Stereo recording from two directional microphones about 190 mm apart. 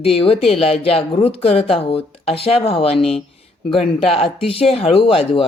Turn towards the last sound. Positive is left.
turn(degrees=30)  # may be behind; listen again after turning